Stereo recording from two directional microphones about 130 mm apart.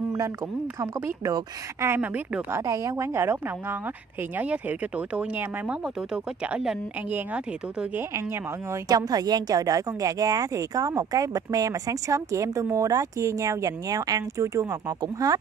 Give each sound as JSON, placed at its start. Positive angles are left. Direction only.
{"t": 0.7, "sound": "speech", "side_deg": -25}
{"t": 2.0, "sound": "speech", "side_deg": -10}
{"t": 2.6, "sound": "speech", "side_deg": -25}
{"t": 8.8, "sound": "speech", "side_deg": -30}